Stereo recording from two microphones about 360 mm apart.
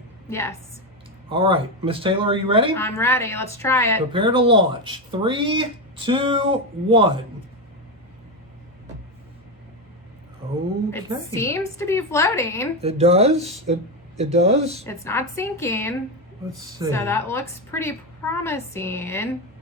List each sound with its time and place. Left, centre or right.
0.3 s a woman's voice: centre
1.3 s speech: centre
2.7 s a woman's voice: centre
4.1 s speech: centre
11.3 s a woman's voice: centre
12.8 s speech: centre
14.8 s a woman's voice: centre